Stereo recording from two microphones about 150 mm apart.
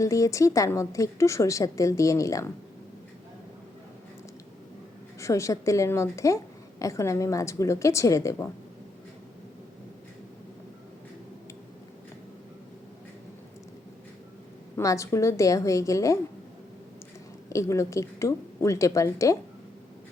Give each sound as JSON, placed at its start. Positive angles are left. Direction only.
{"t": 0.0, "sound": "a woman's voice", "side_deg": 20}
{"t": 5.2, "sound": "a woman's voice", "side_deg": 20}
{"t": 14.8, "sound": "a woman's voice", "side_deg": 20}
{"t": 17.5, "sound": "a woman's voice", "side_deg": 20}